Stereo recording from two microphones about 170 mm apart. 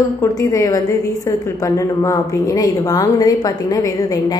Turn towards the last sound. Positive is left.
turn(degrees=20)  # may be behind; listen again after turning